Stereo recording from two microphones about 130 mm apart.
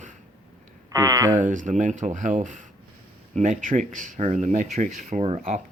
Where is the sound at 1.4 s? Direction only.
75° right (ahead or behind).